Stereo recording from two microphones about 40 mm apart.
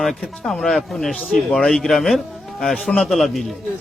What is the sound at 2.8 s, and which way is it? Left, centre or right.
Speech, centre.